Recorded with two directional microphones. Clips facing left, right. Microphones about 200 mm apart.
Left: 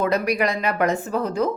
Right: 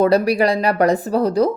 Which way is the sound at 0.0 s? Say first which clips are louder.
Right 6 dB; 35° right (ahead or behind).